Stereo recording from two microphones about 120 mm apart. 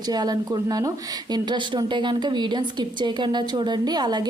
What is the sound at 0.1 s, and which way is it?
A woman's voice, 35° right (ahead or behind).